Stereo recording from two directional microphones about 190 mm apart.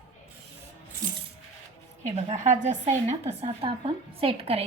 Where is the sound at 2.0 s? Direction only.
40° right (ahead or behind).